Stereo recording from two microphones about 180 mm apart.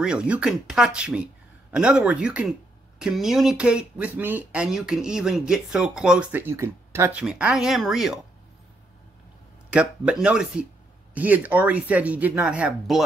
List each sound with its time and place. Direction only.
0.0 s speech: 5° right (ahead or behind)
9.7 s speech: 5° right (ahead or behind)